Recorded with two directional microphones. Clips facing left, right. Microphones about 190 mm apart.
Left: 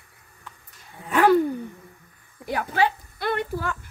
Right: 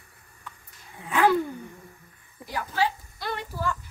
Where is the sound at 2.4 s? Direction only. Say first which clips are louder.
Left 4 dB; 55° left (ahead or behind).